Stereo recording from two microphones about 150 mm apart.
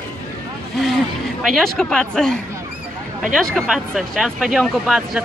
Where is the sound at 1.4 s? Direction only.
Centre (ahead or behind).